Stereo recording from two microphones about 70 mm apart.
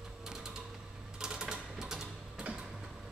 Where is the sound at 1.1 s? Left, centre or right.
Centre.